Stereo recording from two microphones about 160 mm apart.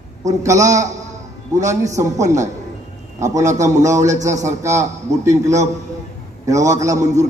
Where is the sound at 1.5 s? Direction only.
50° right (ahead or behind).